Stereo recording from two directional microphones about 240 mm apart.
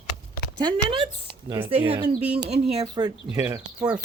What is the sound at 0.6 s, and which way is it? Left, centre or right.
Speech, centre.